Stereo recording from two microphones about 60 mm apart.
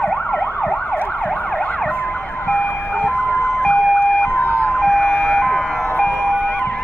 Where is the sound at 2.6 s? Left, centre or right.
Left.